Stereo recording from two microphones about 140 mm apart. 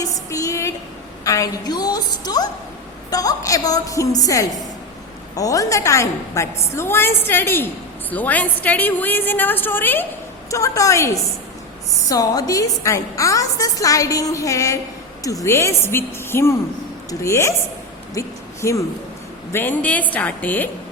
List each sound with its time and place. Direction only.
0.0 s a woman's voice: 25° left (ahead or behind)
18.1 s a sound: 20° left (ahead or behind)
19.5 s a woman's voice: 10° left (ahead or behind)